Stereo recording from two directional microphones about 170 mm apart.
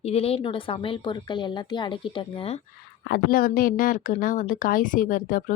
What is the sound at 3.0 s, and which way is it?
Speech, 60° left (ahead or behind).